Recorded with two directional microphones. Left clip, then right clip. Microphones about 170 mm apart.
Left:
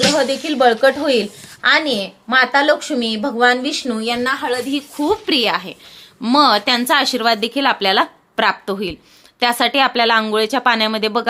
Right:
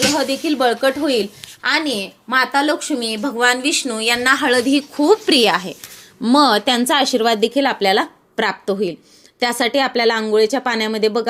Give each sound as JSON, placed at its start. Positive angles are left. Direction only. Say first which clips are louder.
{"t": 0.2, "sound": "a woman's voice", "louder": "left 2 dB", "side_deg": -40}